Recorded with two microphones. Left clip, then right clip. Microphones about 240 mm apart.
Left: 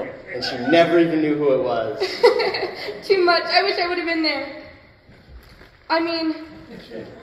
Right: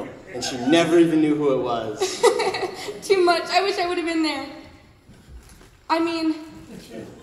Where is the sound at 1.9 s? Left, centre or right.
Right.